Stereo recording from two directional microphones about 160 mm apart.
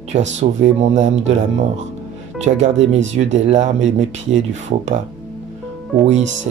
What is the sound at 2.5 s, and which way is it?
Speech, 45° right (ahead or behind).